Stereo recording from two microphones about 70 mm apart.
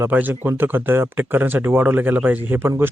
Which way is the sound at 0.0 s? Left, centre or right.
Right.